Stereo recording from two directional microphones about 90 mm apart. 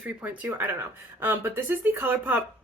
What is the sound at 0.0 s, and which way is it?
Speech, 20° right (ahead or behind).